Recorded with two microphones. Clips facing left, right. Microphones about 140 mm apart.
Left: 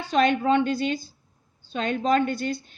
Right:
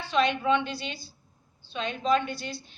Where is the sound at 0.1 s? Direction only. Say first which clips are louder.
Left 4 dB; 45° left (ahead or behind).